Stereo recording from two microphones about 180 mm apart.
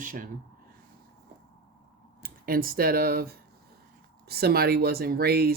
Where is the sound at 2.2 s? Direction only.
55° right (ahead or behind).